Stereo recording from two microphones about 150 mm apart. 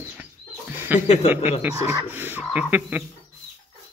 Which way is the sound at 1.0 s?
50° left (ahead or behind).